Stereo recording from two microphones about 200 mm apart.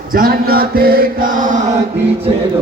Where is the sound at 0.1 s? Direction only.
45° right (ahead or behind).